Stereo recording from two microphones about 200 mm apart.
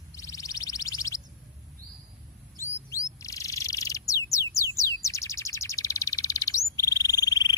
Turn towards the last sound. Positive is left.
turn(degrees=20)  # may be behind; listen again after turning